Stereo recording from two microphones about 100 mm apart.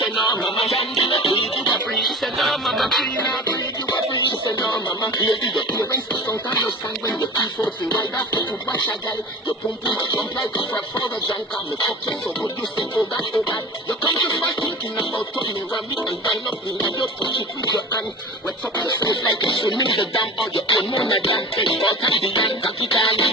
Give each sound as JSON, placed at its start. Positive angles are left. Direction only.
{"t": 0.9, "sound": "music", "side_deg": 60}
{"t": 2.0, "sound": "music", "side_deg": 0}
{"t": 4.1, "sound": "speech", "side_deg": 45}
{"t": 12.9, "sound": "music", "side_deg": 45}
{"t": 17.0, "sound": "music", "side_deg": 50}
{"t": 19.0, "sound": "music", "side_deg": 50}